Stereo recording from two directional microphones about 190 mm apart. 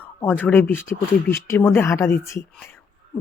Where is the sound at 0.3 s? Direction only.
10° left (ahead or behind).